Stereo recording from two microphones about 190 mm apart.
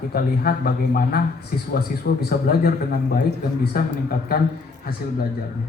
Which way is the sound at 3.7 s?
50° left (ahead or behind).